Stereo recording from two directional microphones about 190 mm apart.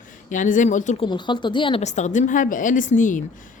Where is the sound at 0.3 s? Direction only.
40° left (ahead or behind).